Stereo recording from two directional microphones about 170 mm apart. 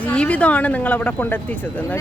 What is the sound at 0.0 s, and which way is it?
Speech, 10° left (ahead or behind).